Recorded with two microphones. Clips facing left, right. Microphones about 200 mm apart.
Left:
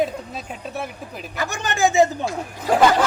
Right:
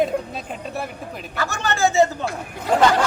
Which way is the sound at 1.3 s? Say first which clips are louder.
Right 1 dB; 15° left (ahead or behind).